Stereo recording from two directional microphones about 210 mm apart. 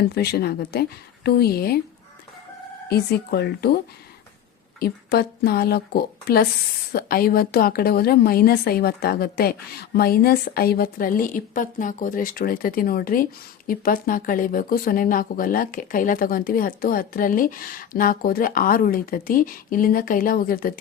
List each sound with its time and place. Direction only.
0.1 s speech: 50° left (ahead or behind)
2.9 s speech: 50° left (ahead or behind)
4.8 s speech: 50° left (ahead or behind)